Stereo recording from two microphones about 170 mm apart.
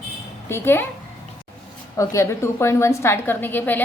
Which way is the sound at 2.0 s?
15° left (ahead or behind).